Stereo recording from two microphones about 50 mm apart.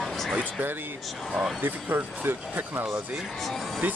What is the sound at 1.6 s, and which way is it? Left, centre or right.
Speech, right.